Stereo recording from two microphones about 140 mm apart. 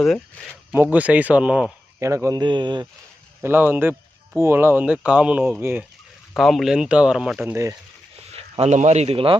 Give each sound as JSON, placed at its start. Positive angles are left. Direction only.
{"t": 0.0, "sound": "speech", "side_deg": 5}
{"t": 0.7, "sound": "speech", "side_deg": -15}
{"t": 2.0, "sound": "speech", "side_deg": -20}
{"t": 2.4, "sound": "speech", "side_deg": -35}
{"t": 3.4, "sound": "speech", "side_deg": -15}
{"t": 6.3, "sound": "speech", "side_deg": 0}
{"t": 8.3, "sound": "speech", "side_deg": -50}